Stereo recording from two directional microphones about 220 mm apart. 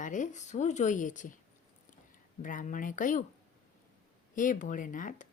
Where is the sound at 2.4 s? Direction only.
35° left (ahead or behind).